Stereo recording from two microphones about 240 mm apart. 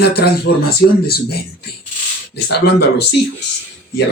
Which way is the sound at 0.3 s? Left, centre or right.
Left.